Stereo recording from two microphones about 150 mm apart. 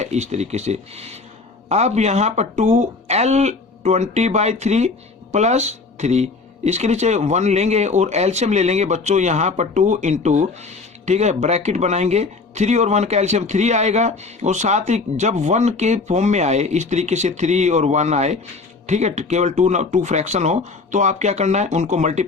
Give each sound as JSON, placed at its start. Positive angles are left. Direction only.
{"t": 0.0, "sound": "speech", "side_deg": -50}